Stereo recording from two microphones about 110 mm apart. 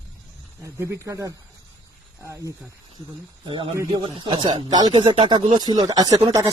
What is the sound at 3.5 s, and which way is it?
Speech, 50° right (ahead or behind).